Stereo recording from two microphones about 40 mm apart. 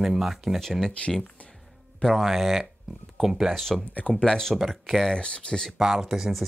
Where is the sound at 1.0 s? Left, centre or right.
Left.